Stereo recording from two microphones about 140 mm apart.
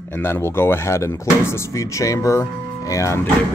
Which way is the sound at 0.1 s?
20° left (ahead or behind).